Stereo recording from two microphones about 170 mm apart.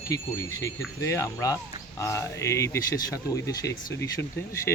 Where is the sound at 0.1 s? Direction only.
20° left (ahead or behind).